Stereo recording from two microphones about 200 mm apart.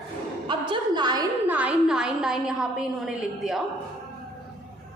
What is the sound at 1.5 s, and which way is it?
A woman's voice, 5° right (ahead or behind).